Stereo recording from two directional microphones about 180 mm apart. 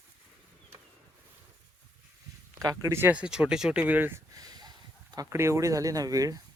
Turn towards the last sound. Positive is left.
turn(degrees=-20)  # may be behind; listen again after turning